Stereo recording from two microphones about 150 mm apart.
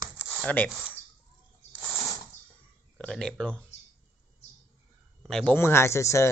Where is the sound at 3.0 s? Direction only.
5° left (ahead or behind).